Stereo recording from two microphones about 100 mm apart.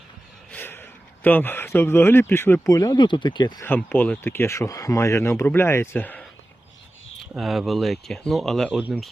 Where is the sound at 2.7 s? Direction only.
40° left (ahead or behind).